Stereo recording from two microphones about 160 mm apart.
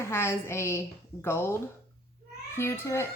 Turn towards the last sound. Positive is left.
turn(degrees=15)  # may be behind; listen again after turning